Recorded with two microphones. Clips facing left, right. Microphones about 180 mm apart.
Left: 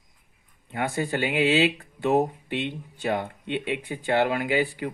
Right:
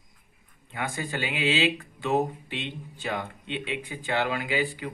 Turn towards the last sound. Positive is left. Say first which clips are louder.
# left 4 dB
turn(degrees=55)  # may be behind; listen again after turning